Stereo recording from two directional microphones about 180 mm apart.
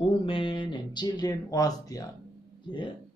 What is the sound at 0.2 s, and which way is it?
Speech, 30° left (ahead or behind).